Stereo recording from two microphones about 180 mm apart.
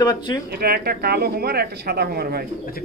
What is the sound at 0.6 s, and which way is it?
Speech, 60° right (ahead or behind).